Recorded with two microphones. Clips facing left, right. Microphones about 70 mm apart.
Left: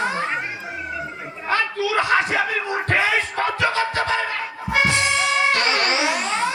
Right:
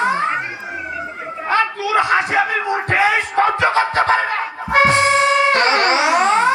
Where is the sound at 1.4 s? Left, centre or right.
Right.